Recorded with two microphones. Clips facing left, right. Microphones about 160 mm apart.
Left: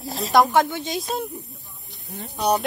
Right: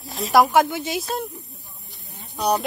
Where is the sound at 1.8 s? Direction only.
Centre (ahead or behind).